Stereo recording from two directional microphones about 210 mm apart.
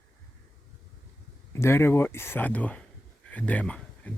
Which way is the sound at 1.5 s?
10° left (ahead or behind).